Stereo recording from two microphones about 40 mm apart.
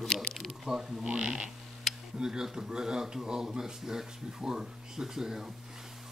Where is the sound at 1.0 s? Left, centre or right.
Right.